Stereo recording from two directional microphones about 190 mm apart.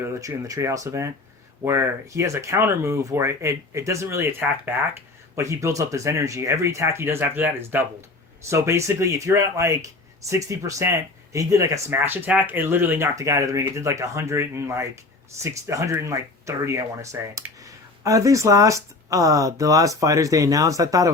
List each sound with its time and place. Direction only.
0.1 s speech: 15° right (ahead or behind)